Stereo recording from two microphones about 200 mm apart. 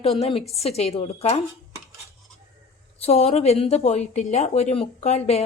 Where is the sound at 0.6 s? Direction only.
30° left (ahead or behind).